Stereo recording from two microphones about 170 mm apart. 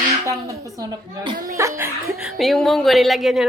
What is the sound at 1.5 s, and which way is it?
Dog, 20° right (ahead or behind).